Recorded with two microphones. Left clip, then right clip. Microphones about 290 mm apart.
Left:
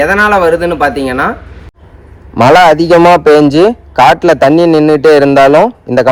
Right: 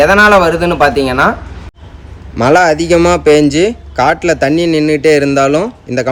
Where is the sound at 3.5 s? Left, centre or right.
Centre.